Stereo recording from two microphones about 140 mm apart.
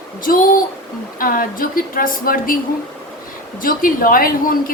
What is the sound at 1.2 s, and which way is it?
A woman's voice, 85° left.